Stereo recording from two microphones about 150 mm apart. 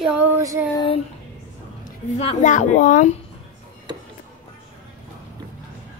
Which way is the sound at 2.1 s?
50° left (ahead or behind).